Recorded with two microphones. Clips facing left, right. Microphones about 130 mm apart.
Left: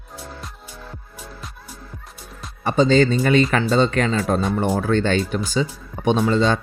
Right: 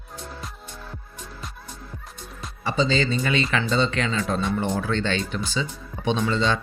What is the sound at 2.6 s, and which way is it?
Speech, 50° left (ahead or behind).